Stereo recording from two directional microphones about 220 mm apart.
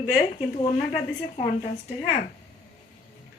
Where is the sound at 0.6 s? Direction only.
25° left (ahead or behind).